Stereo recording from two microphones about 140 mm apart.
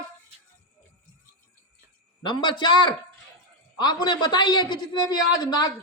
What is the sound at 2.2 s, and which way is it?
A woman's voice, 35° left (ahead or behind).